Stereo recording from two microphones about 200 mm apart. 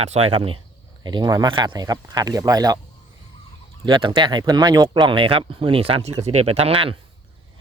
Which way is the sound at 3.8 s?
25° right (ahead or behind).